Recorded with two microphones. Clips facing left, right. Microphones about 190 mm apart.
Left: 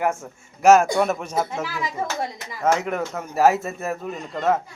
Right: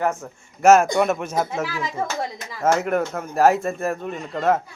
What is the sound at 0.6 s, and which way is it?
Speech, centre (ahead or behind).